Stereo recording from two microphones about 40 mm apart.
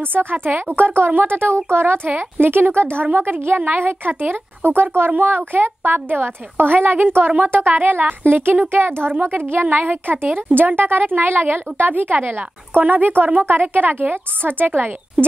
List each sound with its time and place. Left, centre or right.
0.0 s a woman's voice: right
2.0 s a woman's voice: right
8.2 s a woman's voice: right